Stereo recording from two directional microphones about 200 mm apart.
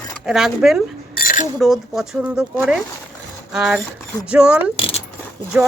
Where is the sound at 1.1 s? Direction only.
45° left (ahead or behind).